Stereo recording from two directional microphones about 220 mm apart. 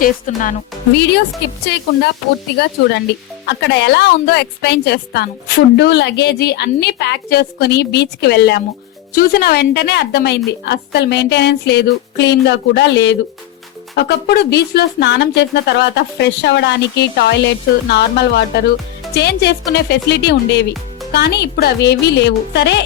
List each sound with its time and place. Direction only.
0.0 s speech: 35° left (ahead or behind)
1.7 s a woman's voice: 50° left (ahead or behind)